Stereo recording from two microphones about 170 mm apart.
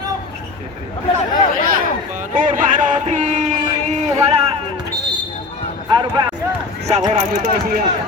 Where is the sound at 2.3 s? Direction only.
50° right (ahead or behind).